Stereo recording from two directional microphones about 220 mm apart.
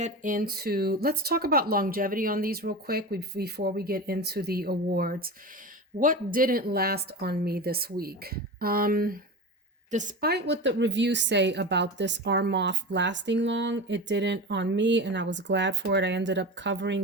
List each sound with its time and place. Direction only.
0.0 s a woman's voice: 35° right (ahead or behind); by 17.0 s 55° right (ahead or behind)